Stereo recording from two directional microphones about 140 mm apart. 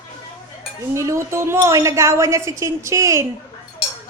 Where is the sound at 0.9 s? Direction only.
20° right (ahead or behind).